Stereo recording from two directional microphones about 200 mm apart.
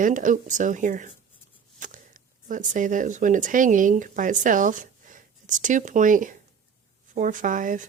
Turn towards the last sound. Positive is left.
turn(degrees=-40)  # may be behind; listen again after turning